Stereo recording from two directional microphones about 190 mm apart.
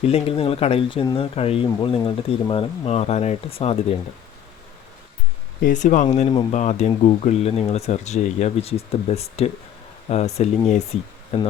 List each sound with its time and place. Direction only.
0.0 s speech: 30° left (ahead or behind)
5.6 s speech: 40° left (ahead or behind)